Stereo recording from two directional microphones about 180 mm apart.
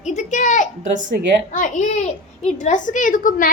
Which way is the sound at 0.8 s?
45° right (ahead or behind).